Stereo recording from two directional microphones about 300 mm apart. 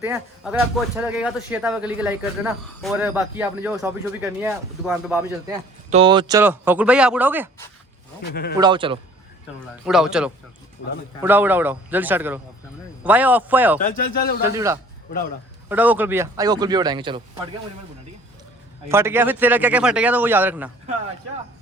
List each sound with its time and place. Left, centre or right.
0.0 s speech: centre
5.9 s speech: centre
8.3 s speech: left
8.5 s speech: centre
9.8 s speech: centre
13.8 s a man's voice: left
14.4 s speech: centre
18.9 s speech: centre